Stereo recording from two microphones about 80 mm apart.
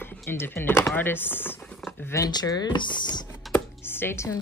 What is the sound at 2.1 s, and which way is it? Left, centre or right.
Speech, left.